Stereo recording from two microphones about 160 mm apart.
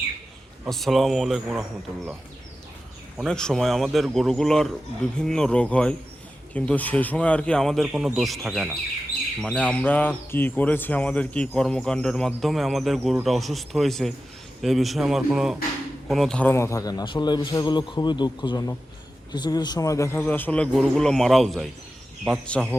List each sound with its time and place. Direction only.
0.7 s speech: centre (ahead or behind)
3.2 s a man's voice: 5° left (ahead or behind)